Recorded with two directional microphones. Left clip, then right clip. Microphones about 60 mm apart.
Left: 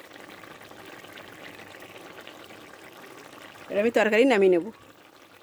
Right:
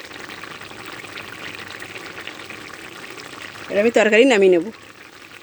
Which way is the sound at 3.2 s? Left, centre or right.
Centre.